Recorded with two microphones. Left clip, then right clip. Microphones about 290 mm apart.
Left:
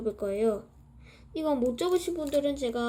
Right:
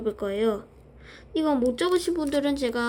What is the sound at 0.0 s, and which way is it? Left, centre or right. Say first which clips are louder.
Speech: right 2 dB; centre.